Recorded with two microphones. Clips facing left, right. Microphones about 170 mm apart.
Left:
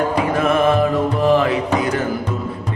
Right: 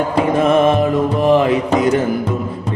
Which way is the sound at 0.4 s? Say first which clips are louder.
Right 2 dB; 20° right (ahead or behind).